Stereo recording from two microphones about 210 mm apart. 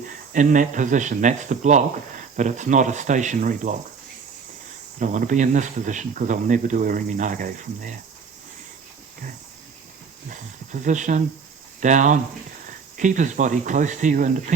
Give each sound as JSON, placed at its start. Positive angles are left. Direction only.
{"t": 0.3, "sound": "speech", "side_deg": -35}
{"t": 4.9, "sound": "speech", "side_deg": -35}
{"t": 10.2, "sound": "speech", "side_deg": -35}